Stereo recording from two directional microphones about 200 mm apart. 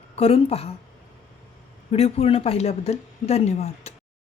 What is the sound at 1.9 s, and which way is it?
A woman's voice, 30° left (ahead or behind).